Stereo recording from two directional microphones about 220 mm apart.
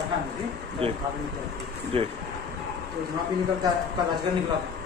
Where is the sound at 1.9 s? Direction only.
25° right (ahead or behind).